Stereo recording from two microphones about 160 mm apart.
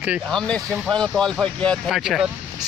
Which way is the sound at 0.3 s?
5° left (ahead or behind).